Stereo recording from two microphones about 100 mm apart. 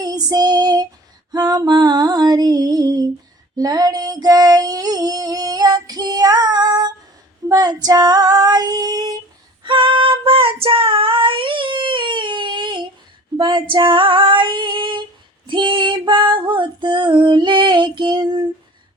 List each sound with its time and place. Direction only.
0.0 s female singing: 40° right (ahead or behind)
1.3 s music: 40° right (ahead or behind)
3.6 s female singing: 40° right (ahead or behind)
9.6 s child singing: 55° right (ahead or behind)
13.3 s female singing: 50° right (ahead or behind)